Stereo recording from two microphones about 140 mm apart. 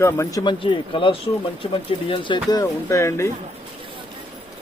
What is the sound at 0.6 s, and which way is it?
Speech, 35° left (ahead or behind).